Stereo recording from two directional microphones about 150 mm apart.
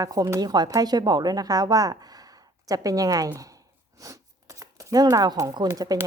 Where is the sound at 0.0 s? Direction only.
25° right (ahead or behind).